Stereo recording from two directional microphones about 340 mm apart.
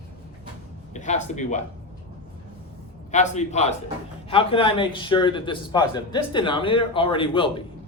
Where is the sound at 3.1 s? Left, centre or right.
Left.